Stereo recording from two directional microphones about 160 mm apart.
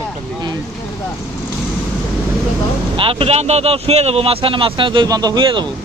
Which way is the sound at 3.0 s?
35° right (ahead or behind).